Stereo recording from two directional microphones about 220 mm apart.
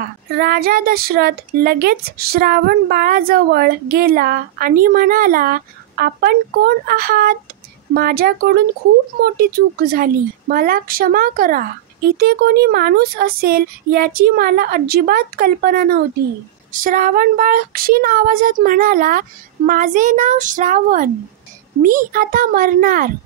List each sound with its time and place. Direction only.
0.4 s speech: 45° right (ahead or behind)